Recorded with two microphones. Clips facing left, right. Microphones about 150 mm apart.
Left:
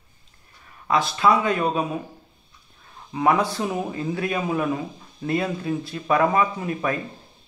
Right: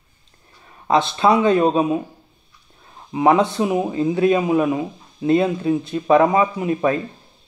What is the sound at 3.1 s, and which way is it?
Speech, 20° right (ahead or behind).